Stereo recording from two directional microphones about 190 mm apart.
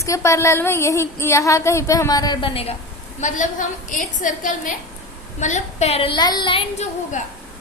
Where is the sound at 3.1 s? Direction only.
40° left (ahead or behind).